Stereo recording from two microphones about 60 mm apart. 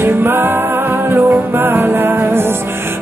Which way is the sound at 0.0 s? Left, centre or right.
Right.